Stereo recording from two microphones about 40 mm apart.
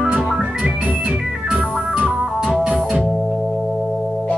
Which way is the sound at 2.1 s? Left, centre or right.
Centre.